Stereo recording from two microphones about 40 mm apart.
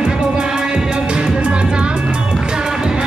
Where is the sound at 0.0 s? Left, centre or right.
Centre.